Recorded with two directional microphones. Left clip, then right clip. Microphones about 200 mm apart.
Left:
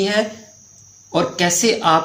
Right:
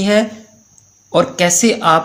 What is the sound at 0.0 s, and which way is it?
Speech, 40° right (ahead or behind).